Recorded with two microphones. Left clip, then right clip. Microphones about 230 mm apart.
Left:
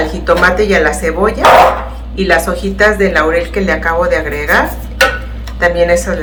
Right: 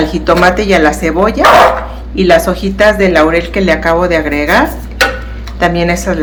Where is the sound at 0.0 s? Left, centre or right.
Right.